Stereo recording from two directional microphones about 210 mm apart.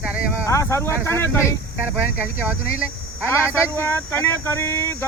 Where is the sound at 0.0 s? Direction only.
5° right (ahead or behind).